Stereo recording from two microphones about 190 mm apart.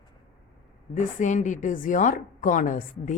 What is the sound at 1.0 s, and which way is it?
Speech, 40° left (ahead or behind).